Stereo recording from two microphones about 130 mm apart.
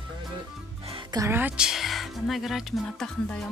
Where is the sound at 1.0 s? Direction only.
30° right (ahead or behind).